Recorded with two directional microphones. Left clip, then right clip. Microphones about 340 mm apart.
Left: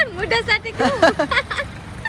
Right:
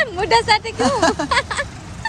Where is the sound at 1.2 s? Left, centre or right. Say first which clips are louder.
Right 1 dB; right.